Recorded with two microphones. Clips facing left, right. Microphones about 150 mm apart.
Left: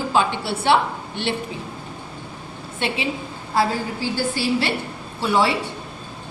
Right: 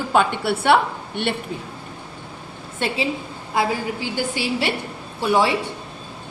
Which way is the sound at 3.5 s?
15° right (ahead or behind).